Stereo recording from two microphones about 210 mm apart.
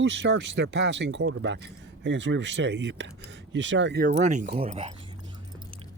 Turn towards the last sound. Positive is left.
turn(degrees=-30)  # may be behind; listen again after turning